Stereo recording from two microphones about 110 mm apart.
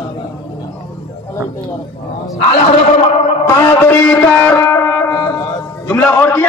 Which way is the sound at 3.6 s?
20° left (ahead or behind).